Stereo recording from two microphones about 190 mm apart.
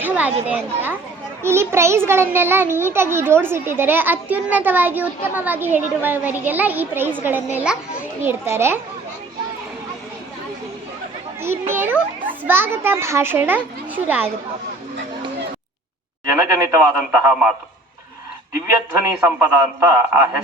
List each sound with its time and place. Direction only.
0.0 s children playing: 5° right (ahead or behind)
0.4 s a child's voice: 10° right (ahead or behind)
11.3 s a child's voice: 10° right (ahead or behind)
16.2 s a child's voice: 15° right (ahead or behind)
18.7 s a child's voice: 15° right (ahead or behind)